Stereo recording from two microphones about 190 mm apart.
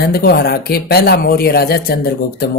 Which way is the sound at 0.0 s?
55° left (ahead or behind).